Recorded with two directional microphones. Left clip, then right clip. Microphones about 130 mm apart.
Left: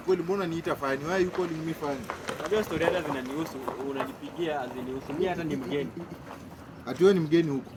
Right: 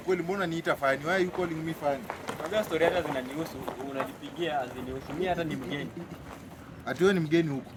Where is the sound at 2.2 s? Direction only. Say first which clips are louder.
Left 3 dB; 60° left (ahead or behind).